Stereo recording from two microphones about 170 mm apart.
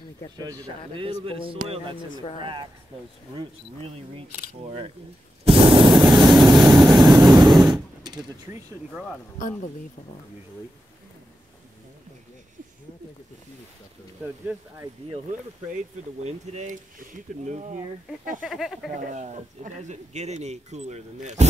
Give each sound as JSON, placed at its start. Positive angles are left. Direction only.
{"t": 0.4, "sound": "speech", "side_deg": -20}
{"t": 1.0, "sound": "speech", "side_deg": -30}
{"t": 5.4, "sound": "vehicle", "side_deg": -35}
{"t": 8.9, "sound": "speech", "side_deg": 5}
{"t": 16.3, "sound": "speech", "side_deg": -45}
{"t": 18.4, "sound": "speech", "side_deg": 0}
{"t": 18.9, "sound": "speech", "side_deg": -45}